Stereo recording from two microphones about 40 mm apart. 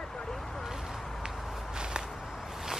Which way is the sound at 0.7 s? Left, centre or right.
Centre.